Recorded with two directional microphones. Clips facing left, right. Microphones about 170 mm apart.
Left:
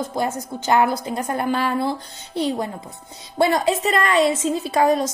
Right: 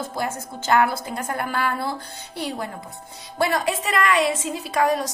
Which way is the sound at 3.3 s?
25° left (ahead or behind).